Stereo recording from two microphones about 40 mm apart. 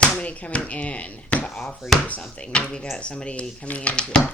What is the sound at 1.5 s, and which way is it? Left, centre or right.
Speech, centre.